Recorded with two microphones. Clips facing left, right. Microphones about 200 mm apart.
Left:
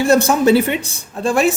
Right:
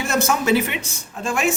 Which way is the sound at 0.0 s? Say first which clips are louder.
Left 8 dB; 30° left (ahead or behind).